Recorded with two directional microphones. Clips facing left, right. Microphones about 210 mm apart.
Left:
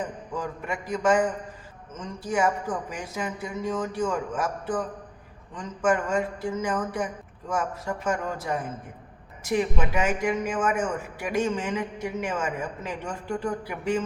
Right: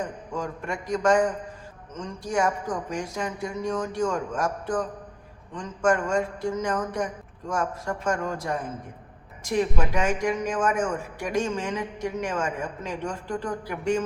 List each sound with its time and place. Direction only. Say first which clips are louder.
0.3 s a man's voice: right 1 dB; 5° left (ahead or behind)